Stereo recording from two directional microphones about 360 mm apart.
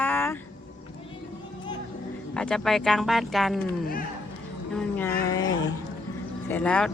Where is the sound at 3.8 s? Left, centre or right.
Left.